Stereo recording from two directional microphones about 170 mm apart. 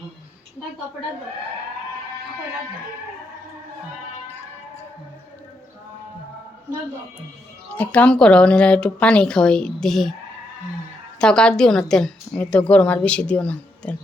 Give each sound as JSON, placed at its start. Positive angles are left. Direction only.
{"t": 7.7, "sound": "speech", "side_deg": 10}
{"t": 11.2, "sound": "a woman's voice", "side_deg": 5}